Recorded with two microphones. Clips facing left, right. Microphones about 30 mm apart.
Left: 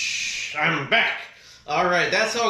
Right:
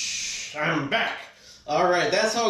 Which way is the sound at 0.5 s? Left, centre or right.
Left.